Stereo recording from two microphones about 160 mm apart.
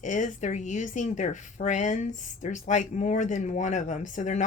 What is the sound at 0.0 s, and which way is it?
Speech, 50° left (ahead or behind).